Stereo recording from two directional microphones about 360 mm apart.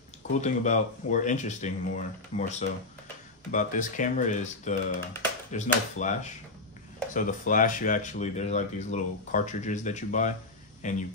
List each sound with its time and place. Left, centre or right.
0.4 s speech: centre